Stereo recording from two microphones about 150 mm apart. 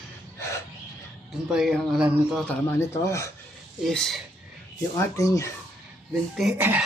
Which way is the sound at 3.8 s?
Centre (ahead or behind).